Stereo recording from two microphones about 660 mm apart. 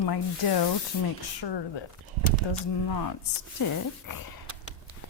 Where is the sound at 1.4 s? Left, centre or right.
Left.